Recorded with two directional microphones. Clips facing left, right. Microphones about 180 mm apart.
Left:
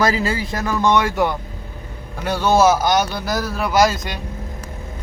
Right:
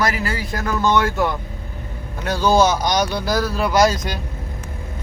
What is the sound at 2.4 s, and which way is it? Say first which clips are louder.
Speech: left 1 dB; 5° left (ahead or behind).